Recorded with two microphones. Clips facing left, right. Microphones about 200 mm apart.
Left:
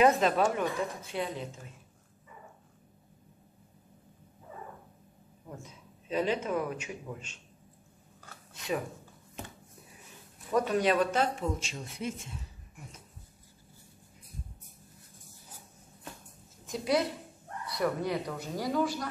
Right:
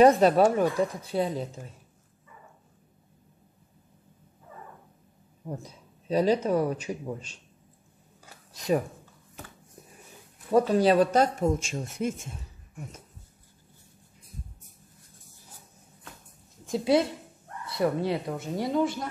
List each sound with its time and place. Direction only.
0.0 s a man's voice: 35° right (ahead or behind)
5.5 s a man's voice: 35° right (ahead or behind)
8.5 s a man's voice: 40° right (ahead or behind)
10.5 s speech: 30° right (ahead or behind)
16.6 s speech: 30° right (ahead or behind)